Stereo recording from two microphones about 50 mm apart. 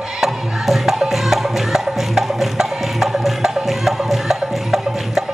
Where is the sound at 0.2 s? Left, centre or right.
Centre.